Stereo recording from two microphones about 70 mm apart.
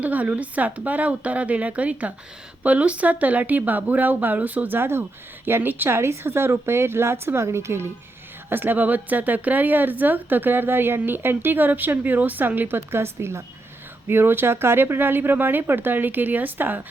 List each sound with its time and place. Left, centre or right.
0.0 s a woman's voice: right